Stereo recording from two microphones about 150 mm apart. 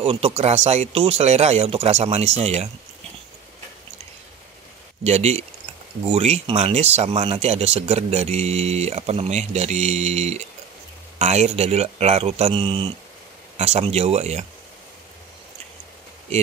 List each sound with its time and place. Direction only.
0.0 s speech: 40° right (ahead or behind)
5.0 s speech: 45° right (ahead or behind)